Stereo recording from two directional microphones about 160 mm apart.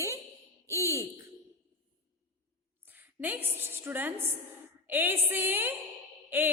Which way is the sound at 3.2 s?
10° right (ahead or behind).